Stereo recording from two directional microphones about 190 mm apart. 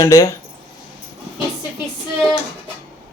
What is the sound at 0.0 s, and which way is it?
Speech, 15° left (ahead or behind).